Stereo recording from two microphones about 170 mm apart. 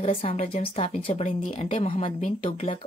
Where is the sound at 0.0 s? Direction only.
35° left (ahead or behind).